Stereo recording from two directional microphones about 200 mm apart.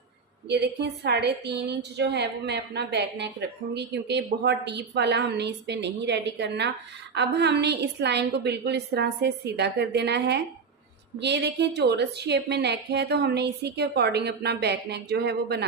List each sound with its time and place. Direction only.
0.4 s a woman's voice: 55° right (ahead or behind)